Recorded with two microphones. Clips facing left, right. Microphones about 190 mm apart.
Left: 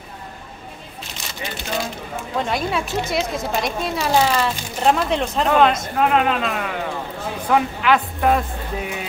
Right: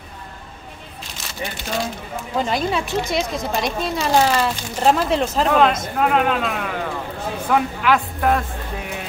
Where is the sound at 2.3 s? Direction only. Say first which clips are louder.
Right 1 dB; centre (ahead or behind).